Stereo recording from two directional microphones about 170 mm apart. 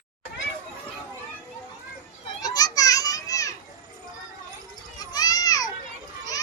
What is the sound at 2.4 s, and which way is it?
Children playing, 20° left (ahead or behind).